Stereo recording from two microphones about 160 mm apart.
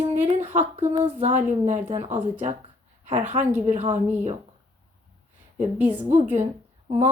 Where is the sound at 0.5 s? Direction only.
45° right (ahead or behind).